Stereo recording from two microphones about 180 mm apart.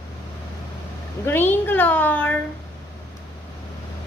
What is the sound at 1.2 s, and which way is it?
A child's voice, 10° left (ahead or behind).